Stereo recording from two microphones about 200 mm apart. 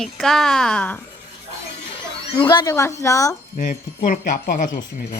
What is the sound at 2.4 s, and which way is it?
Speech, 20° left (ahead or behind).